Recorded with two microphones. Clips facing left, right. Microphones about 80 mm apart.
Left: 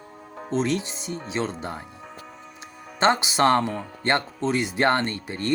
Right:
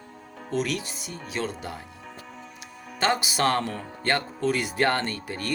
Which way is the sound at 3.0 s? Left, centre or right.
Left.